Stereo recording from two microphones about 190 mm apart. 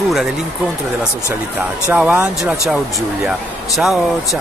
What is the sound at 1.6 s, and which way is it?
Speech, 5° right (ahead or behind).